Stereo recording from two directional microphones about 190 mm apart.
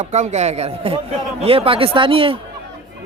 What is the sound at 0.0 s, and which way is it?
A man's voice, 35° right (ahead or behind).